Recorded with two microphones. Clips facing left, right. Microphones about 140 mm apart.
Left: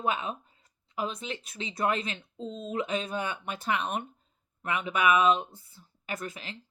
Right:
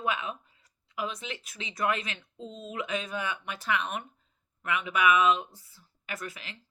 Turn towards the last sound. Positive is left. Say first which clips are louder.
# left 2 dB
turn(degrees=35)  # may be behind; listen again after turning